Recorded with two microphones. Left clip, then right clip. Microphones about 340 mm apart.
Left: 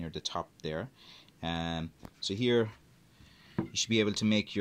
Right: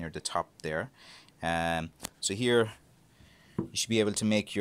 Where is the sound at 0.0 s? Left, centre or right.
Centre.